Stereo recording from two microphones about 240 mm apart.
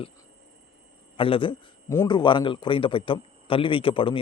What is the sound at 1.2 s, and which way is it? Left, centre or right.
A man's voice, left.